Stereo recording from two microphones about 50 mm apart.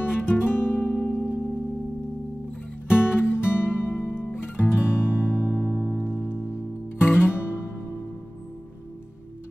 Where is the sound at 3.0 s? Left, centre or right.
Left.